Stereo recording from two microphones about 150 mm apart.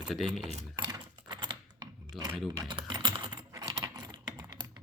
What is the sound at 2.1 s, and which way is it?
Speech, centre (ahead or behind).